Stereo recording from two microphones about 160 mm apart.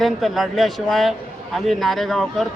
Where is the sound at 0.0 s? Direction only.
Centre (ahead or behind).